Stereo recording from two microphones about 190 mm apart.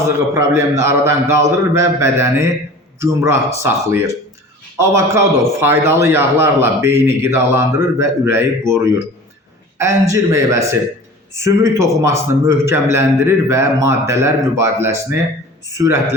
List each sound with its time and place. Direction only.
0.3 s a man's voice: 15° right (ahead or behind)